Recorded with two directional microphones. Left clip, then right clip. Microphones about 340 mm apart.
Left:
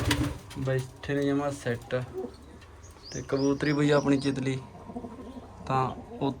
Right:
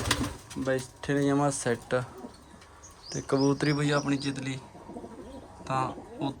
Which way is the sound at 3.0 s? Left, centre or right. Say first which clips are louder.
Right 1 dB; centre.